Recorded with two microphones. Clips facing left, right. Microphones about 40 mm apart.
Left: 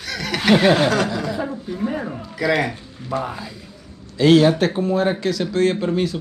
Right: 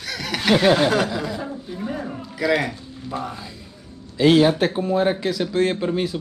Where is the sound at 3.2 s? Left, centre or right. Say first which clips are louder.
Left 3 dB; centre.